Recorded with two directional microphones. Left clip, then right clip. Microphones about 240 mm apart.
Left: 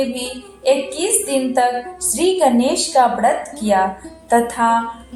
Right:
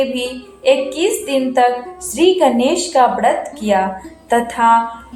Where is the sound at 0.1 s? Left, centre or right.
Centre.